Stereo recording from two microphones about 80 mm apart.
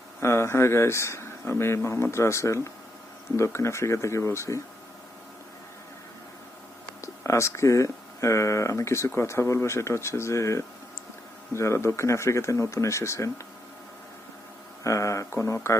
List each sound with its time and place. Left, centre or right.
0.2 s speech: left
7.0 s speech: left
14.8 s speech: left